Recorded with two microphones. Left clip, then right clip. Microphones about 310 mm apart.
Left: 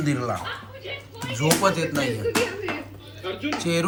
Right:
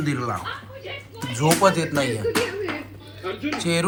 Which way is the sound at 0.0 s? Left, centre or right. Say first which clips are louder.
Even; centre.